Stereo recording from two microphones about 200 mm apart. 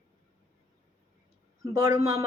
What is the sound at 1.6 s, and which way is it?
Speech, 15° right (ahead or behind).